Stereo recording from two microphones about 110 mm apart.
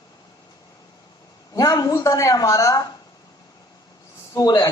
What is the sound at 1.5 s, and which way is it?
A man's voice, 30° left (ahead or behind).